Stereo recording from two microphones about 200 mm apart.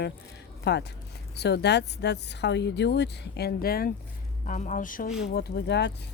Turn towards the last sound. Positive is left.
turn(degrees=55)  # may be behind; listen again after turning